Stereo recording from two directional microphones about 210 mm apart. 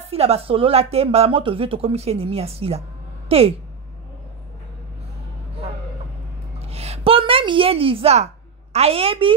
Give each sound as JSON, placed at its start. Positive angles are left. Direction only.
{"t": 0.0, "sound": "a woman's voice", "side_deg": -30}
{"t": 6.6, "sound": "a sound", "side_deg": -30}
{"t": 8.7, "sound": "speech", "side_deg": -30}